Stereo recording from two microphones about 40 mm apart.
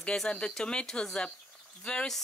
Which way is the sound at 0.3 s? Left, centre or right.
Left.